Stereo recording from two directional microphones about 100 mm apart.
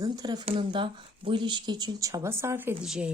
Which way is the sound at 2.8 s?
5° right (ahead or behind).